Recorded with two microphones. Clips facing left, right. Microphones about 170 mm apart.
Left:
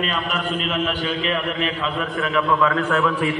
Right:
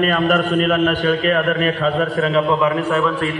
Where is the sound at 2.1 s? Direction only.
35° right (ahead or behind).